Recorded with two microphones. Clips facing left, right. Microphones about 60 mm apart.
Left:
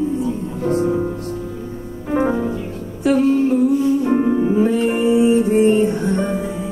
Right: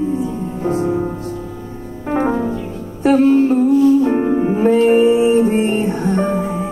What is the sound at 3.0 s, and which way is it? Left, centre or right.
Music, right.